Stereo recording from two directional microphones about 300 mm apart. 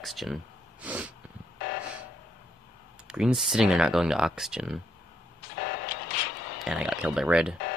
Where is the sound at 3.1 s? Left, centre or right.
Centre.